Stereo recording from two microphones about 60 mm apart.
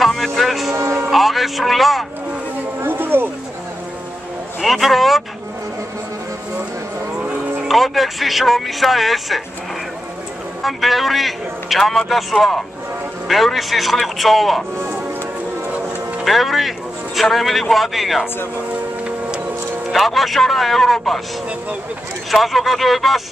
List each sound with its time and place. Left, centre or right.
0.0 s music: centre
0.7 s music: right
1.1 s a man's voice: centre
2.8 s a sound: right
4.6 s a man's voice: centre
7.6 s a man's voice: centre
10.6 s a man's voice: centre
16.3 s a man's voice: centre
19.9 s a man's voice: centre
22.3 s a man's voice: centre